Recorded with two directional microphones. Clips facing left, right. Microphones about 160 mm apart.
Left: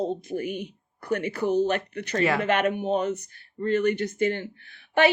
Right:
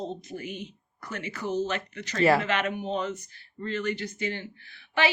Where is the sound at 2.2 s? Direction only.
35° right (ahead or behind).